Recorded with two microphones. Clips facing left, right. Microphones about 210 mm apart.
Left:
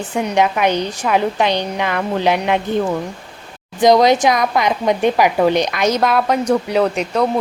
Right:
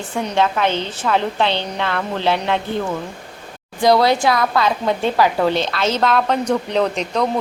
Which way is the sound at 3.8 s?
20° left (ahead or behind).